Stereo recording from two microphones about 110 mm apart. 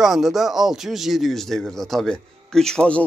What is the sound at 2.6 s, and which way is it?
Speech, 5° left (ahead or behind).